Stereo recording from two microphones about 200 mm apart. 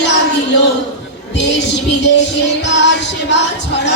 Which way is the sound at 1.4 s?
60° left (ahead or behind).